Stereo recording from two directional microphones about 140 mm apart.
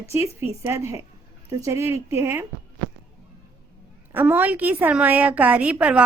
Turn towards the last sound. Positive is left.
turn(degrees=-10)  # may be behind; listen again after turning